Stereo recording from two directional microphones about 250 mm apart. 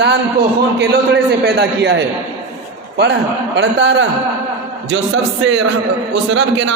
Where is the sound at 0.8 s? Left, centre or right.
Right.